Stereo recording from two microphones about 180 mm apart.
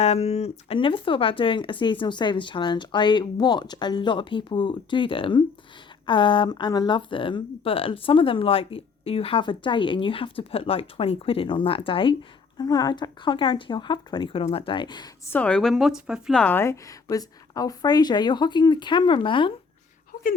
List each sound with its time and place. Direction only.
0.0 s speech: 35° left (ahead or behind)
15.3 s speech: 5° left (ahead or behind); by 19.5 s 25° left (ahead or behind)